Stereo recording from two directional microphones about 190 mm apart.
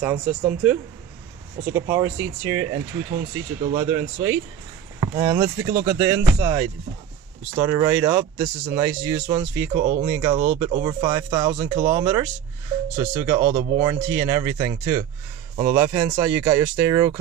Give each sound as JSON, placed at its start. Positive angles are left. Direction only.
{"t": 0.0, "sound": "speech", "side_deg": -10}
{"t": 9.8, "sound": "speech", "side_deg": -40}
{"t": 10.0, "sound": "speech", "side_deg": -10}